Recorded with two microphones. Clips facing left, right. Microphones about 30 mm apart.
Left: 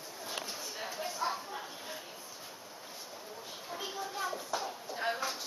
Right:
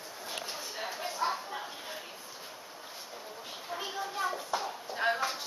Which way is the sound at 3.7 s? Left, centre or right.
Centre.